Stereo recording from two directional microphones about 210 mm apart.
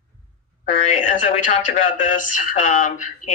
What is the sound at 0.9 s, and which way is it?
A man's voice, 40° left (ahead or behind).